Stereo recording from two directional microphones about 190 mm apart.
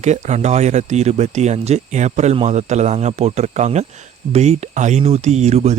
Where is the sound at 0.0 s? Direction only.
35° right (ahead or behind).